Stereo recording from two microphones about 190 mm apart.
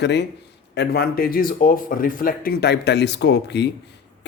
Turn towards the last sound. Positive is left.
turn(degrees=65)  # may be behind; listen again after turning